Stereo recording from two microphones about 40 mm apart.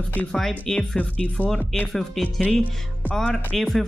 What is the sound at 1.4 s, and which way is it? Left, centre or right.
Speech, left.